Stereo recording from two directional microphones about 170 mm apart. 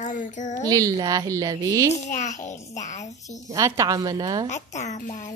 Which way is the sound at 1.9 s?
45° left (ahead or behind).